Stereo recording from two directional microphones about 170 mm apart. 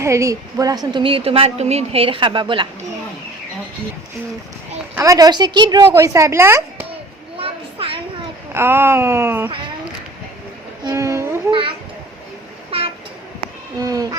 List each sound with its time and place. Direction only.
0.0 s a woman's voice: 15° right (ahead or behind)
4.9 s a woman's voice: 20° right (ahead or behind)
7.3 s a sound: 30° right (ahead or behind)
8.5 s a woman's voice: 15° right (ahead or behind)
10.8 s a woman's voice: 15° right (ahead or behind)
12.7 s train: 35° right (ahead or behind)
13.7 s a woman's voice: 20° right (ahead or behind)